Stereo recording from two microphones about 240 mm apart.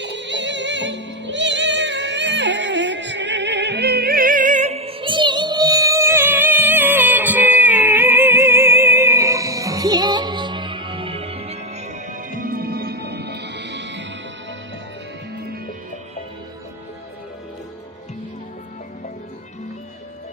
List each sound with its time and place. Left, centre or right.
0.0 s music: right